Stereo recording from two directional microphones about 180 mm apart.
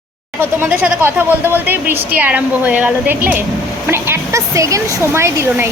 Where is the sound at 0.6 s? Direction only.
10° right (ahead or behind).